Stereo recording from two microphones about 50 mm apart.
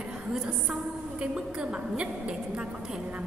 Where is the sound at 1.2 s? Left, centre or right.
Right.